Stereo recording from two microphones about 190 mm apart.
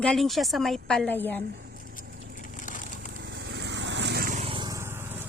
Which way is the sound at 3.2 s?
70° right (ahead or behind).